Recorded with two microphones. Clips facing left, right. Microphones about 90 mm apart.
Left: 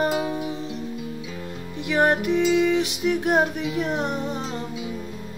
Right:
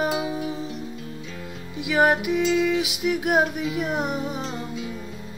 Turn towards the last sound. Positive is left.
turn(degrees=0)  # may be behind; listen again after turning